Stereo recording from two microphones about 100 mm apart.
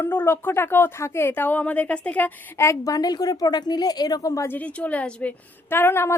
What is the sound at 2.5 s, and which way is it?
Speech, 30° left (ahead or behind).